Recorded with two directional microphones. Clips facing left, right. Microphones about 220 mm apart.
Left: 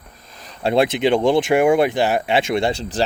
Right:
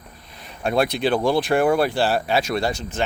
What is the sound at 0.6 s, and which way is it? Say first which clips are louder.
Speech: left 4 dB; 25° left (ahead or behind).